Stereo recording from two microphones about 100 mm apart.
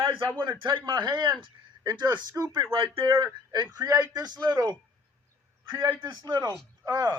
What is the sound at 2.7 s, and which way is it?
Speech, 65° right (ahead or behind).